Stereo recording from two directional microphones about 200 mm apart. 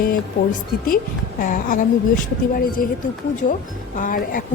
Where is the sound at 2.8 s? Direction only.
45° left (ahead or behind).